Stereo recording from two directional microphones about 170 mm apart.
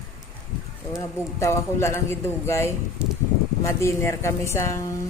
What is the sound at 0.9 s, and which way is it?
A woman's voice, 15° left (ahead or behind).